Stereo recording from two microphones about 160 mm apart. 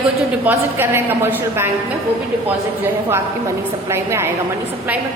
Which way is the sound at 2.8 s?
15° right (ahead or behind).